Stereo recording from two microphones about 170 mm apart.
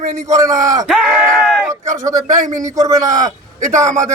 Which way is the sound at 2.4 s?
50° right (ahead or behind).